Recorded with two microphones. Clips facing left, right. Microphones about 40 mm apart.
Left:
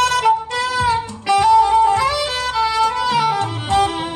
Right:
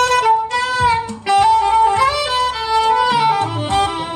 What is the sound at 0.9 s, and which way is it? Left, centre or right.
Saxophone, centre.